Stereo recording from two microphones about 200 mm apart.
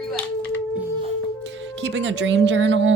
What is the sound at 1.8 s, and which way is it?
Speech, 65° right (ahead or behind).